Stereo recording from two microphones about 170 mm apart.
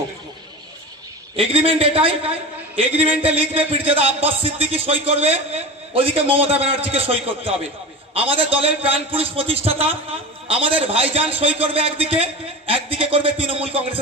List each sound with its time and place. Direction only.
1.4 s a man's voice: 35° right (ahead or behind)